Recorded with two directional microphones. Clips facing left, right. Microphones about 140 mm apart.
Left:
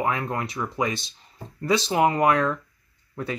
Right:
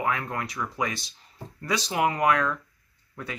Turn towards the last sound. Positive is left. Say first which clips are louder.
# left 6 dB
turn(degrees=30)  # may be behind; listen again after turning